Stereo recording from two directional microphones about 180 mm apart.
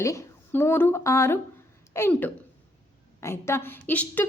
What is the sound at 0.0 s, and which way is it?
A woman's voice, 15° left (ahead or behind).